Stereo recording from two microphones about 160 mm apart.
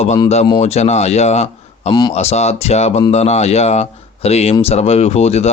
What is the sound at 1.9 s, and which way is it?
Speech, 25° left (ahead or behind).